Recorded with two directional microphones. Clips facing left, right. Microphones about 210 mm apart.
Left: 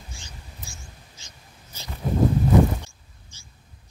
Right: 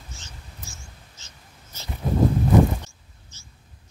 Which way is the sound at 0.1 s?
15° left (ahead or behind).